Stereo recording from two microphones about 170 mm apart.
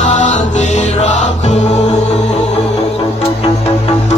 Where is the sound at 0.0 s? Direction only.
45° left (ahead or behind).